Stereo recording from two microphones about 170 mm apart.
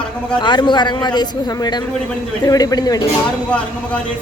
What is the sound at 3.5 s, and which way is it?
Speech, 5° left (ahead or behind).